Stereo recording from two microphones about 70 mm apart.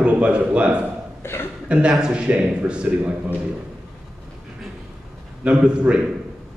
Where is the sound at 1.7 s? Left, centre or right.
Centre.